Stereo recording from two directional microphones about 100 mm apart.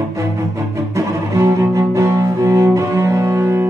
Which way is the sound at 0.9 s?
30° right (ahead or behind).